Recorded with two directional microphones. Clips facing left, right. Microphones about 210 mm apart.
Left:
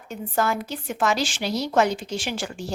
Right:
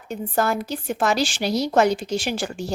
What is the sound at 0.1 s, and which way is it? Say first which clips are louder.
Speech: right 2 dB; 35° right (ahead or behind).